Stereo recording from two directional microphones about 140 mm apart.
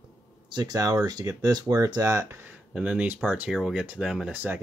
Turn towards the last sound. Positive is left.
turn(degrees=-15)  # may be behind; listen again after turning